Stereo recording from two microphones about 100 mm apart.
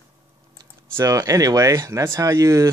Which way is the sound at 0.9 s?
35° right (ahead or behind).